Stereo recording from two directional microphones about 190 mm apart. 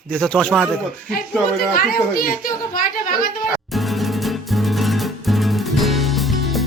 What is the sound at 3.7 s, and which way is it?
Music, centre (ahead or behind).